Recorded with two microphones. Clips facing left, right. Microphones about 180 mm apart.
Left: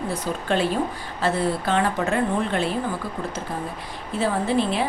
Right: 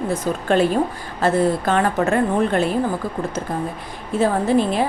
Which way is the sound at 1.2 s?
45° right (ahead or behind).